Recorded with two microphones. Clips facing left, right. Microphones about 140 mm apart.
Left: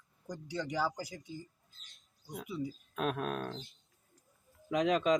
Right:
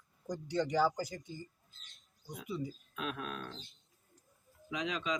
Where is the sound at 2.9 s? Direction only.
45° left (ahead or behind).